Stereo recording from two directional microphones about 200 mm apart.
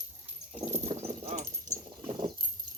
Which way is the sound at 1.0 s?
35° right (ahead or behind).